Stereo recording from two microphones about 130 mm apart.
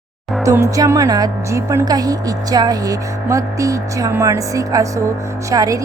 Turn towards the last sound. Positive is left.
turn(degrees=-25)  # may be behind; listen again after turning